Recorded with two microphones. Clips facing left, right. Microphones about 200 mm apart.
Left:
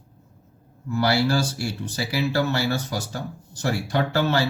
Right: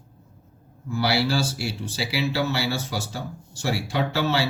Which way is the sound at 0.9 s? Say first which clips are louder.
Left 2 dB; 50° left (ahead or behind).